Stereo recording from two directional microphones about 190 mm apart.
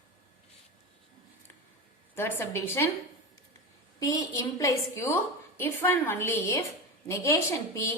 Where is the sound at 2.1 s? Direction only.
10° left (ahead or behind).